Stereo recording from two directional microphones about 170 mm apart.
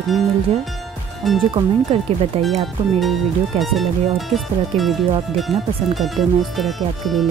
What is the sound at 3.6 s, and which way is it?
Speech, centre (ahead or behind).